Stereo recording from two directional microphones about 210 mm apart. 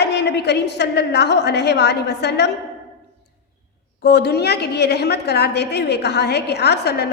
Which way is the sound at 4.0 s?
50° left (ahead or behind).